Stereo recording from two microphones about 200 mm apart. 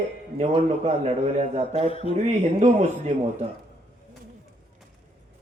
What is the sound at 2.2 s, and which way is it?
Speech, 35° right (ahead or behind).